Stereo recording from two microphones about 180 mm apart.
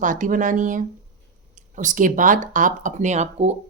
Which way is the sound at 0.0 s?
45° right (ahead or behind).